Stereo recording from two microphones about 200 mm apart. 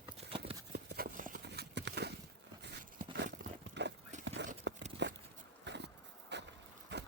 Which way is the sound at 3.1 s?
60° right (ahead or behind).